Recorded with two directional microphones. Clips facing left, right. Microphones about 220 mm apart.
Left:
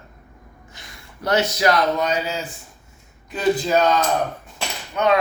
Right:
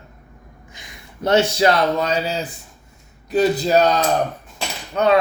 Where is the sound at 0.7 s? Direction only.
15° right (ahead or behind).